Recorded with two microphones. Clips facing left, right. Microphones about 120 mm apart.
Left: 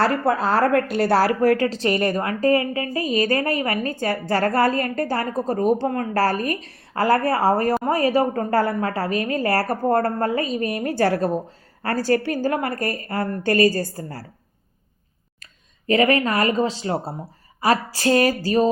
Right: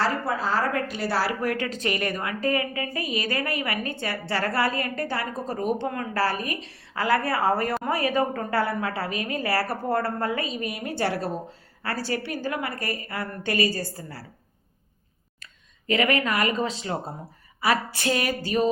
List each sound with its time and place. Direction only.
0.0 s a woman's voice: 60° left (ahead or behind)
15.9 s a woman's voice: 40° left (ahead or behind)